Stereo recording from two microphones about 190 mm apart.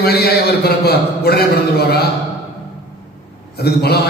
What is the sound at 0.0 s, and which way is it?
A man's voice, 55° left (ahead or behind).